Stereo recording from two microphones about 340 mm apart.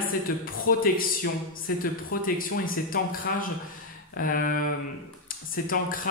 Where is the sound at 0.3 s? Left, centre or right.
Left.